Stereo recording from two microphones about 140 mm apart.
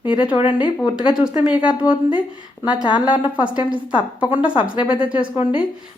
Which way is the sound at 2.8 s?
30° left (ahead or behind).